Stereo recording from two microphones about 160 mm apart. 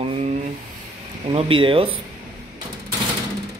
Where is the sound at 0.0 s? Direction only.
40° right (ahead or behind).